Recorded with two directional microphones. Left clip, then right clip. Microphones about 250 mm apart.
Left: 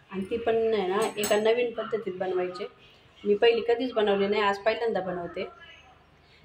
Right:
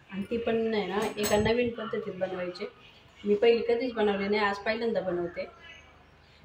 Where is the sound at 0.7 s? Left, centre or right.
Left.